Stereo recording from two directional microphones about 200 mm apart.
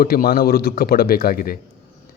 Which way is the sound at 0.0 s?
50° left (ahead or behind).